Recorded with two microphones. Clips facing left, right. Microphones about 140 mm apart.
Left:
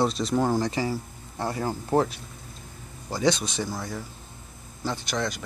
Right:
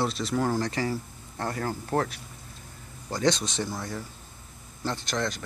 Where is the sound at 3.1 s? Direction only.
5° left (ahead or behind).